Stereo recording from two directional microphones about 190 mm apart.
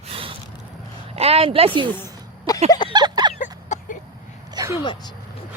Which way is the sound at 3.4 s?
45° left (ahead or behind).